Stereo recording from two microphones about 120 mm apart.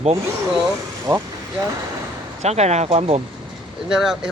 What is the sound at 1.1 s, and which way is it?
Speech, 35° right (ahead or behind).